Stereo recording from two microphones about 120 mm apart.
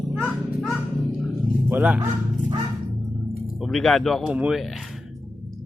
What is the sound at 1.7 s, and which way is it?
Speech, 15° right (ahead or behind).